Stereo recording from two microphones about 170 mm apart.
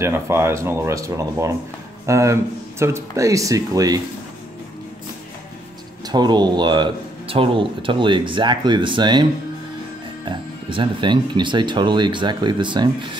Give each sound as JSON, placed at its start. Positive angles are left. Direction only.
{"t": 0.0, "sound": "speech", "side_deg": -15}
{"t": 6.0, "sound": "speech", "side_deg": -25}
{"t": 10.2, "sound": "speech", "side_deg": -30}